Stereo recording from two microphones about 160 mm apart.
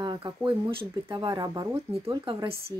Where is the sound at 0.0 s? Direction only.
25° right (ahead or behind).